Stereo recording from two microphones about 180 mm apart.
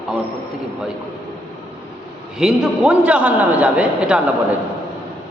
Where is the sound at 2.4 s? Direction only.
5° right (ahead or behind).